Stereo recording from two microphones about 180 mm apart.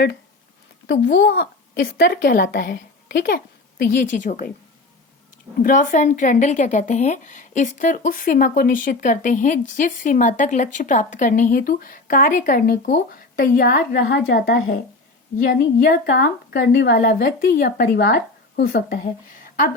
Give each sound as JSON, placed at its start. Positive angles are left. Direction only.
{"t": 0.9, "sound": "a woman's voice", "side_deg": 90}
{"t": 3.8, "sound": "speech", "side_deg": 45}
{"t": 5.6, "sound": "a woman's voice", "side_deg": 45}